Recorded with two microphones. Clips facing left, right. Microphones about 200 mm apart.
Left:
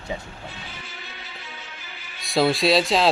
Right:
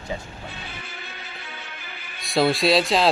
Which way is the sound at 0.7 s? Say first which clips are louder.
Right 2 dB; 55° right (ahead or behind).